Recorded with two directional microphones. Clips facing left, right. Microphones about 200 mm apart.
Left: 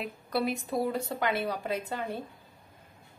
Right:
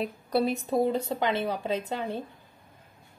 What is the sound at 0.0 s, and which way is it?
A woman's voice, 30° right (ahead or behind).